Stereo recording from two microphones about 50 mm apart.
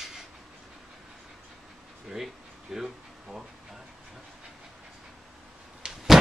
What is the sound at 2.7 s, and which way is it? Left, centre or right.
Speech, centre.